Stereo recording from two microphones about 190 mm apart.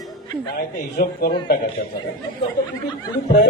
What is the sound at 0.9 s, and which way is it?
Speech, 55° left (ahead or behind).